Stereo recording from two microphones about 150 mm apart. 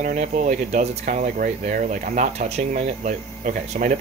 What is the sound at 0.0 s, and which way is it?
Speech, 60° right (ahead or behind).